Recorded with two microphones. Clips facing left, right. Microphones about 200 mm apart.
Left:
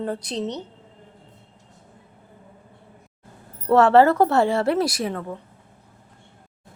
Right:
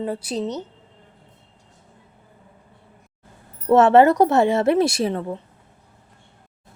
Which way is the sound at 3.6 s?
20° right (ahead or behind).